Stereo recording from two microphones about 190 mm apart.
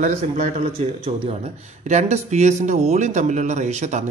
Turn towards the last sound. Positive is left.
turn(degrees=-40)  # may be behind; listen again after turning